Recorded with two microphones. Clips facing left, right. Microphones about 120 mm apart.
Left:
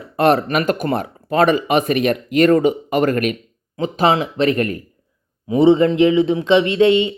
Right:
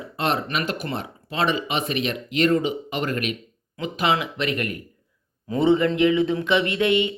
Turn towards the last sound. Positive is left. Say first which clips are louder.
# left 7 dB
turn(degrees=25)  # may be behind; listen again after turning